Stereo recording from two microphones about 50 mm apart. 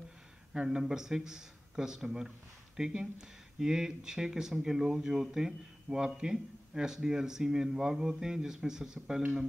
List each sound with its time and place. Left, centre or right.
0.5 s speech: centre